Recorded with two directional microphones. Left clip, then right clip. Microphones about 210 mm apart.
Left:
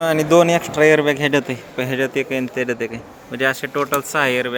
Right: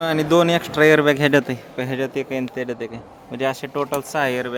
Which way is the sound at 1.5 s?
Centre (ahead or behind).